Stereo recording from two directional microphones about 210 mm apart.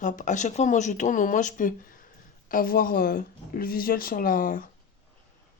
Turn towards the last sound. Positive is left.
turn(degrees=40)  # may be behind; listen again after turning